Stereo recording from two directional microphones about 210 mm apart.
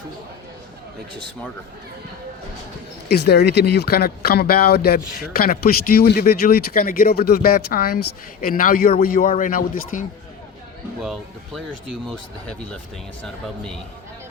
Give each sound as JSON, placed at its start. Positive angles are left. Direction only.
{"t": 3.1, "sound": "a man's voice", "side_deg": 50}
{"t": 11.0, "sound": "speech", "side_deg": 0}